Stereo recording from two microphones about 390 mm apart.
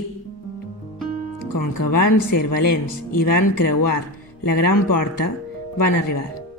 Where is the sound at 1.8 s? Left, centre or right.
Left.